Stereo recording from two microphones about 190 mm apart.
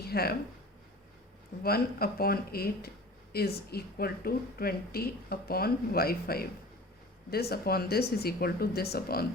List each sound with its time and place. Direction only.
0.0 s speech: 55° left (ahead or behind)
1.6 s speech: 55° left (ahead or behind)